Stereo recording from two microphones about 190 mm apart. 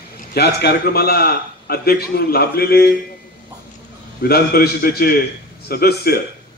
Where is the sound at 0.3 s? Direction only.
60° left (ahead or behind).